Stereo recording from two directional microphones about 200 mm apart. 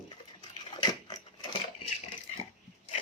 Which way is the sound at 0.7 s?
20° left (ahead or behind).